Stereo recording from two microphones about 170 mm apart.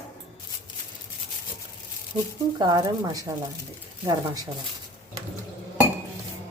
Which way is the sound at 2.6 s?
25° right (ahead or behind).